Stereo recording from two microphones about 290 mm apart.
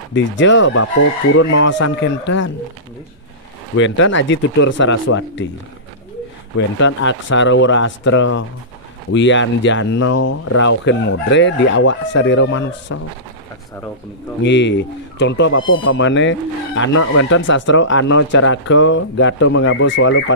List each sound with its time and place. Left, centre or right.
0.1 s speech: left
3.7 s speech: left
6.8 s speech: left
14.4 s speech: left